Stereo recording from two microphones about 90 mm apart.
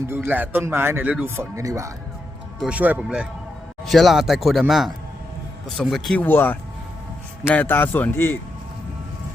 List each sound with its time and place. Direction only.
0.0 s speech: 25° right (ahead or behind)
1.0 s speech: 15° right (ahead or behind)
1.4 s speech: 35° right (ahead or behind)
2.6 s speech: 15° right (ahead or behind)
3.8 s speech: centre (ahead or behind)
5.6 s speech: 5° left (ahead or behind)
6.1 s a man's voice: 25° left (ahead or behind)